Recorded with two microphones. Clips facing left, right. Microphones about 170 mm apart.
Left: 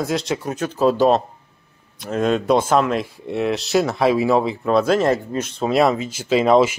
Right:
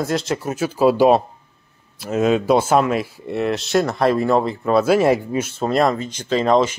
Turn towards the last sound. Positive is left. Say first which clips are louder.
# left 2 dB
turn(degrees=10)  # may be behind; listen again after turning